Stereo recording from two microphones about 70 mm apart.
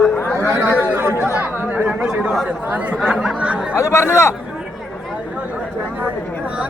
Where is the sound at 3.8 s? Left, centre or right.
Left.